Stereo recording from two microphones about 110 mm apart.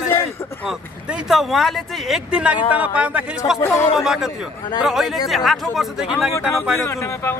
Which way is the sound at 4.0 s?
5° right (ahead or behind).